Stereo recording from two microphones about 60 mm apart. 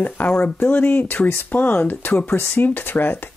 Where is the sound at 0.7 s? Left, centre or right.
Left.